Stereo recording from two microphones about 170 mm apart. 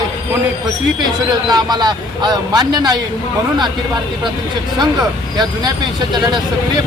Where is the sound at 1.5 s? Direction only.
25° right (ahead or behind).